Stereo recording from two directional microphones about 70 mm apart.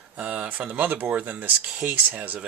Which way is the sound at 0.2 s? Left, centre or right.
Centre.